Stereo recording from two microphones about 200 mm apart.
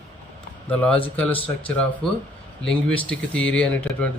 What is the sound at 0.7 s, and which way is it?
Speech, 5° left (ahead or behind).